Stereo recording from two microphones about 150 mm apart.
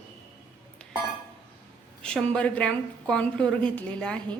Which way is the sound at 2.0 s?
5° left (ahead or behind).